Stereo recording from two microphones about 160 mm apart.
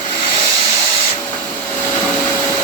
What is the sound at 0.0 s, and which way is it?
Vehicle, 30° left (ahead or behind).